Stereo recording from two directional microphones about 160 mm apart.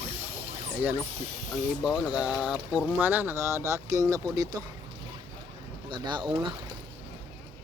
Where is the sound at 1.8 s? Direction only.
5° right (ahead or behind).